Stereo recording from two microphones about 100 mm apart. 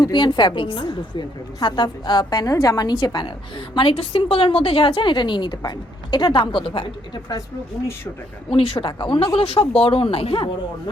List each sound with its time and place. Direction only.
0.0 s a woman's voice: 50° left (ahead or behind)
3.8 s a woman's voice: 60° left (ahead or behind)
8.4 s speech: 70° left (ahead or behind)
8.9 s speech: 55° left (ahead or behind)